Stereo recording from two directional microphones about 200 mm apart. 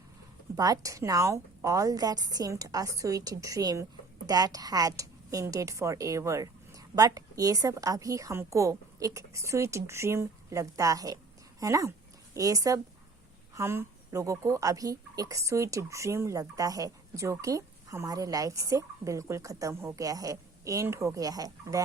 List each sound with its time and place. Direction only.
0.5 s speech: 15° right (ahead or behind)